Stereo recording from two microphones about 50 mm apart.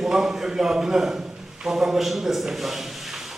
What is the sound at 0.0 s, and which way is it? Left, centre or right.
A man's voice, centre.